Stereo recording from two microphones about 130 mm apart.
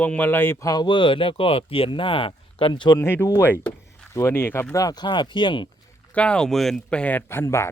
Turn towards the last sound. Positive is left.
turn(degrees=20)  # may be behind; listen again after turning